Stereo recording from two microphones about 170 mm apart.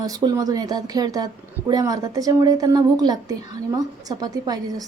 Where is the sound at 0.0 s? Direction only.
20° right (ahead or behind).